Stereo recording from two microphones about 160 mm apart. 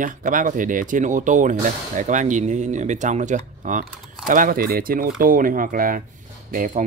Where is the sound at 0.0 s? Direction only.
55° right (ahead or behind).